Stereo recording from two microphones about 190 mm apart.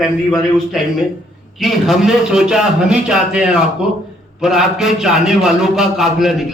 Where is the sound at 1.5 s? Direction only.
Centre (ahead or behind).